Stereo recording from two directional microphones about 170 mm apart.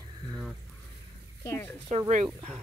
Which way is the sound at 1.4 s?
15° left (ahead or behind).